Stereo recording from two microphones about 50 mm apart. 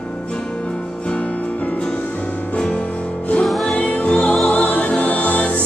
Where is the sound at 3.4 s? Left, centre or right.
Centre.